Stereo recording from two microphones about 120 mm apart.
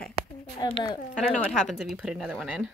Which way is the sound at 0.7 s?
45° left (ahead or behind).